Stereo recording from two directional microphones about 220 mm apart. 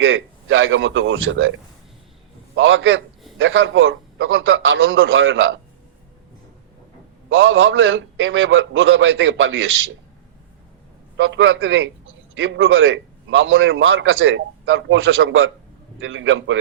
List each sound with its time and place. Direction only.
0.0 s a man's voice: 60° right (ahead or behind)
2.6 s a man's voice: 60° right (ahead or behind)
7.3 s a man's voice: 60° right (ahead or behind)
11.2 s a man's voice: 60° right (ahead or behind)